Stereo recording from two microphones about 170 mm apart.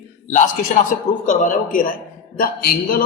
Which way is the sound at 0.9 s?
50° left (ahead or behind).